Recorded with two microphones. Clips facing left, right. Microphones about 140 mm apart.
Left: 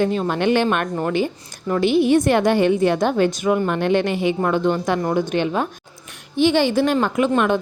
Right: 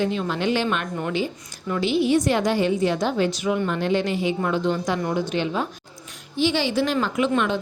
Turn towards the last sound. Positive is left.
turn(degrees=50)  # may be behind; listen again after turning